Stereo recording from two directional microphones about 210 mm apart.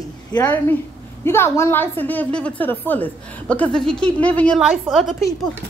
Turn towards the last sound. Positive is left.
turn(degrees=0)  # may be behind; listen again after turning